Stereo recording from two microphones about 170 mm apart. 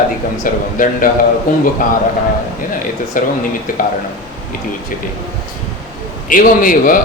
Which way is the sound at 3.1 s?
55° left (ahead or behind).